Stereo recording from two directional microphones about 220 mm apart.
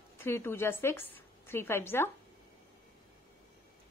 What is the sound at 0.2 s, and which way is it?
A woman's voice, 10° left (ahead or behind).